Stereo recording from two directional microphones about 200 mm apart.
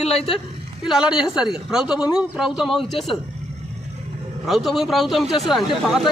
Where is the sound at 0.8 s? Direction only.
5° right (ahead or behind).